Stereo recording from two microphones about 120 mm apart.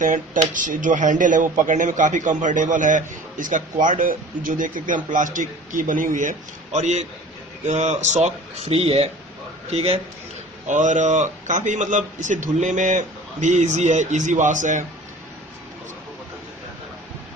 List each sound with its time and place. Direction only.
0.0 s speech: 90° right
6.7 s a man's voice: 75° right (ahead or behind)
10.7 s speech: 90° right